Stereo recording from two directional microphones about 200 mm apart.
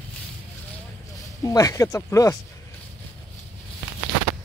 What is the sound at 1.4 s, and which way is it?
Speech, 15° left (ahead or behind).